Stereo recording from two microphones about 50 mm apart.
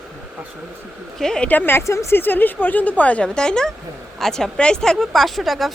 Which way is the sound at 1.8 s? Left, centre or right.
Left.